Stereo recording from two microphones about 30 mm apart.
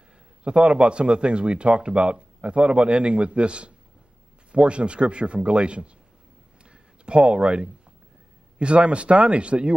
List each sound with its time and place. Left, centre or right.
0.4 s a man's voice: right
6.6 s a sound: right
8.5 s a man's voice: right